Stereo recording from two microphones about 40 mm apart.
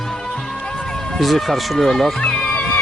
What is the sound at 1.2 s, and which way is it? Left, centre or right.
Speech, centre.